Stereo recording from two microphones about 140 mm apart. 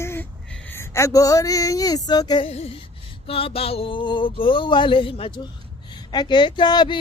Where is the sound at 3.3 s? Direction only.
40° left (ahead or behind).